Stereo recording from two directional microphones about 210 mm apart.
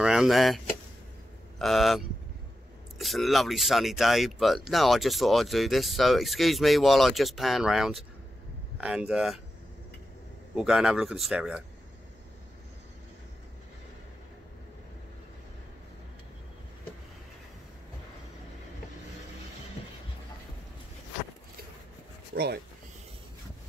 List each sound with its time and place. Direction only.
0.0 s speech: 5° right (ahead or behind)
10.5 s speech: 5° right (ahead or behind)
22.3 s speech: 50° right (ahead or behind)